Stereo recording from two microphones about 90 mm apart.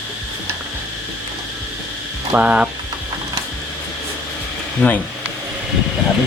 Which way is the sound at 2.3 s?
15° right (ahead or behind).